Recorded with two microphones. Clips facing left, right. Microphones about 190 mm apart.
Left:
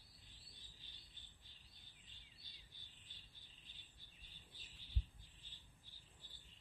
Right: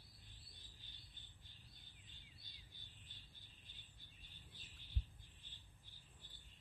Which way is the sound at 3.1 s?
50° right (ahead or behind).